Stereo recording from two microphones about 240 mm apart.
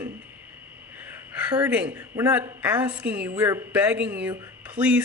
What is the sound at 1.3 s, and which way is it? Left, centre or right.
A woman's voice, centre.